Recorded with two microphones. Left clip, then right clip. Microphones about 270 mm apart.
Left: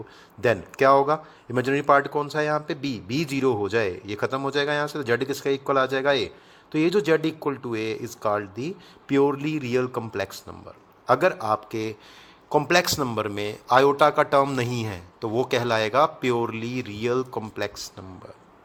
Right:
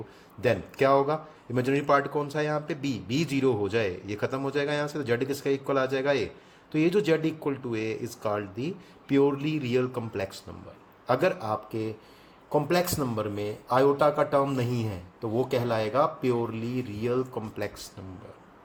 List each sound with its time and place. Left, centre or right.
0.4 s a man's voice: left
13.0 s a man's voice: left
14.5 s speech: left
15.6 s speech: left